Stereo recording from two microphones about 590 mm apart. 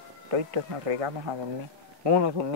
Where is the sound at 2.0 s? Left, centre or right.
Right.